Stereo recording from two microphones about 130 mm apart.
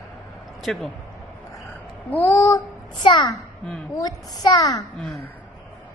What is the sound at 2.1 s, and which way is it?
A child's voice, 20° left (ahead or behind).